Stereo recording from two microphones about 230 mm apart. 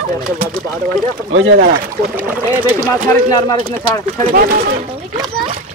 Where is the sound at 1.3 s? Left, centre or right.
Right.